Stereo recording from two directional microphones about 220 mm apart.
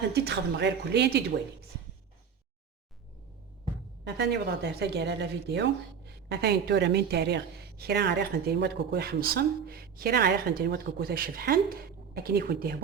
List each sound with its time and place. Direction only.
0.1 s a woman's voice: 50° right (ahead or behind)
4.0 s a woman's voice: 50° right (ahead or behind)